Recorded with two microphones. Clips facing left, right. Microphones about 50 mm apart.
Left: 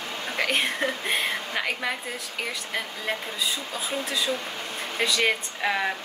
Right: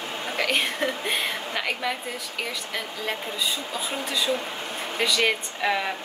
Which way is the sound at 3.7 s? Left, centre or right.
Right.